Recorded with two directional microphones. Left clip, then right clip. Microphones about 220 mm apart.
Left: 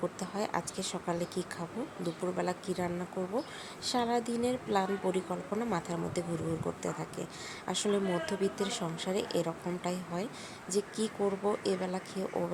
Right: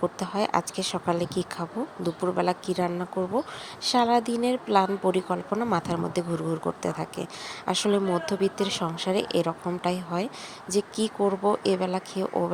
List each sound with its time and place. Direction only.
0.0 s speech: 20° right (ahead or behind)